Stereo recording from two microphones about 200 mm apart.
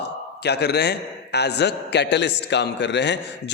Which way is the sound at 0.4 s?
55° left (ahead or behind).